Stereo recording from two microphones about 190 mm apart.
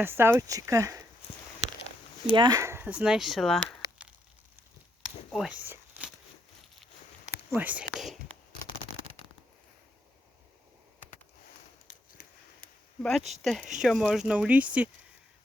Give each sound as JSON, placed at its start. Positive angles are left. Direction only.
{"t": 0.0, "sound": "speech", "side_deg": -10}
{"t": 2.3, "sound": "speech", "side_deg": -20}
{"t": 5.0, "sound": "a sound", "side_deg": -5}
{"t": 7.5, "sound": "speech", "side_deg": -10}
{"t": 11.9, "sound": "a sound", "side_deg": 45}
{"t": 13.0, "sound": "speech", "side_deg": 0}